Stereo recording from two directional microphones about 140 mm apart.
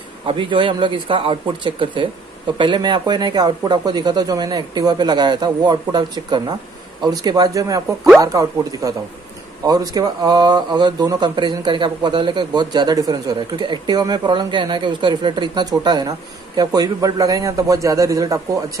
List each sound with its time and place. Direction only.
0.3 s speech: 35° right (ahead or behind)